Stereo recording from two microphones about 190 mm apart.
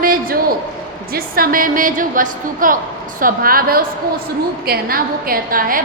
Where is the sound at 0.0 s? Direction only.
50° right (ahead or behind).